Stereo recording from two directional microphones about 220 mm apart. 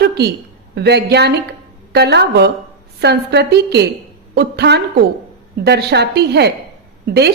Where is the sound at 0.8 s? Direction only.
50° right (ahead or behind).